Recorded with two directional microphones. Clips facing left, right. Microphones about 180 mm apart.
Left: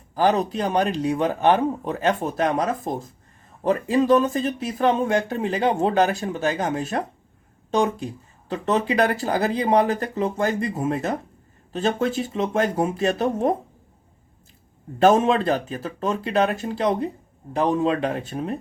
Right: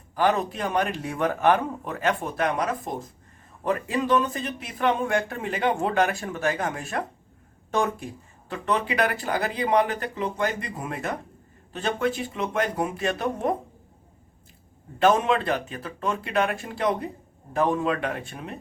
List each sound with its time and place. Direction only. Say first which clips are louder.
0.2 s speech: left 3 dB; 35° left (ahead or behind)
8.6 s speech: left 4 dB; 40° left (ahead or behind)
10.7 s speech: left 7 dB; 25° left (ahead or behind)
12.1 s speech: left 6 dB; 40° left (ahead or behind)
12.7 s speech: left 5 dB; 30° left (ahead or behind)
15.3 s speech: left 3 dB; 40° left (ahead or behind)